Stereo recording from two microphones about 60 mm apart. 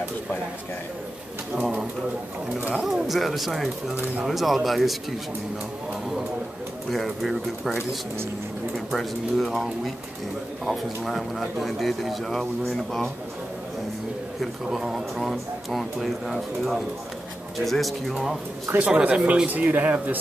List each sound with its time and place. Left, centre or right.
1.5 s speech: right
2.7 s speech: centre
6.9 s speech: centre
8.7 s speech: centre
14.7 s speech: centre
18.9 s speech: centre